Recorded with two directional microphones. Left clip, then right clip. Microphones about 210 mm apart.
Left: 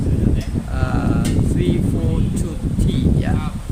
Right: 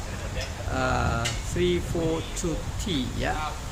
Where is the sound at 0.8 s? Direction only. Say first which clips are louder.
Left 2 dB; 10° left (ahead or behind).